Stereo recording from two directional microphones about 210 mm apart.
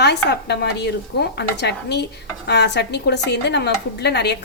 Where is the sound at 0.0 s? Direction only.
55° left (ahead or behind).